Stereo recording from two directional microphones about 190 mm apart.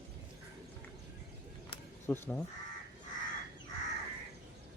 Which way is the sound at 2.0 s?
10° left (ahead or behind).